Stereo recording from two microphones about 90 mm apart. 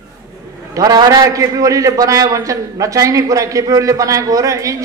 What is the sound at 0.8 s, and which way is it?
A man's voice, 40° right (ahead or behind).